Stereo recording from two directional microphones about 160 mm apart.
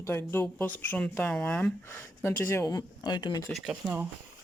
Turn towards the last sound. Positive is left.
turn(degrees=-5)  # may be behind; listen again after turning